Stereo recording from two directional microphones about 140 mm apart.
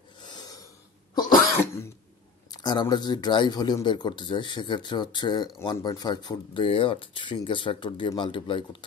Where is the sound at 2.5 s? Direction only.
30° left (ahead or behind).